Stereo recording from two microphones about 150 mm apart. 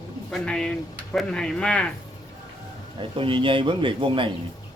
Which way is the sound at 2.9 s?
35° right (ahead or behind).